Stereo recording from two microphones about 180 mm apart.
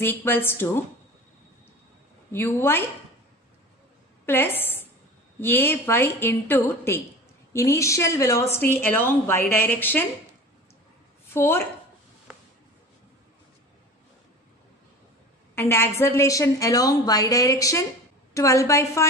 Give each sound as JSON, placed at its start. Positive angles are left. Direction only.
{"t": 0.0, "sound": "speech", "side_deg": 10}
{"t": 2.3, "sound": "speech", "side_deg": 10}
{"t": 4.3, "sound": "a woman's voice", "side_deg": 10}
{"t": 11.2, "sound": "a woman's voice", "side_deg": 10}
{"t": 15.5, "sound": "speech", "side_deg": 15}